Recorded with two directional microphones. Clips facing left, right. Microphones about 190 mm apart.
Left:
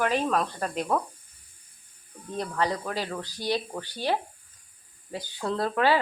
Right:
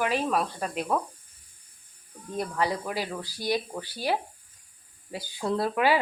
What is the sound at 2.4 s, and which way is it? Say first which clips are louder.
Speech: even; 10° right (ahead or behind).